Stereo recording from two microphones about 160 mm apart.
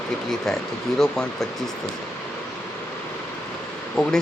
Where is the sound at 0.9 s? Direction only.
5° left (ahead or behind).